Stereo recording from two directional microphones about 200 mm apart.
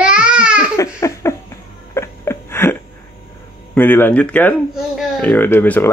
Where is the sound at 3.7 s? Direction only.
10° left (ahead or behind).